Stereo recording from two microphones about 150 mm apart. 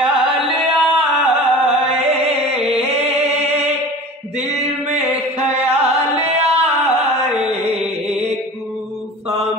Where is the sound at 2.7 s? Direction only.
40° right (ahead or behind).